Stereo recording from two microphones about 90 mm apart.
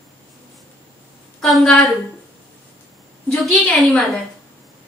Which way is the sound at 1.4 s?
5° left (ahead or behind).